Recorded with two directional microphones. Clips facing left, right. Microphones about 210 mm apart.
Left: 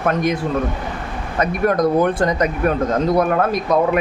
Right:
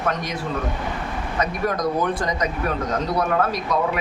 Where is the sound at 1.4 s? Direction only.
55° left (ahead or behind).